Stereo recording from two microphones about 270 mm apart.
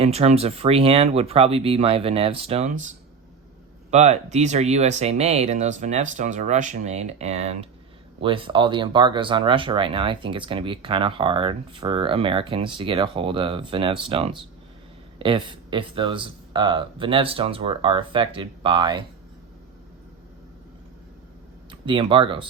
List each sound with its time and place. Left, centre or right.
0.0 s speech: right
3.9 s speech: right
21.7 s speech: centre